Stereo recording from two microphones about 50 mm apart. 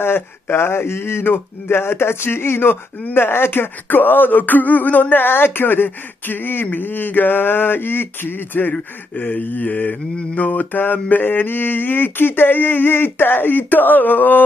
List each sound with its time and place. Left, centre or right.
0.0 s a sound: left
3.2 s speech: left
8.7 s speech: left
9.5 s mantra: left